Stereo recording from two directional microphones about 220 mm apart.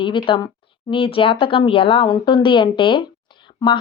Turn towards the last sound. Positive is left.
turn(degrees=20)  # may be behind; listen again after turning